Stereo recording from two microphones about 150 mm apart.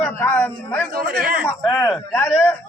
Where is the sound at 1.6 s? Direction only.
20° left (ahead or behind).